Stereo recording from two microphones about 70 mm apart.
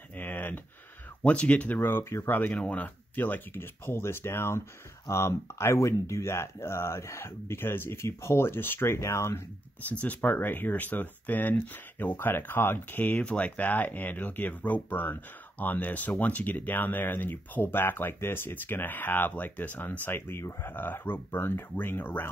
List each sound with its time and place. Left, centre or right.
0.2 s a sound: left
1.2 s speech: centre
1.9 s speech: left
2.5 s speech: left
9.8 s speech: left
20.1 s speech: left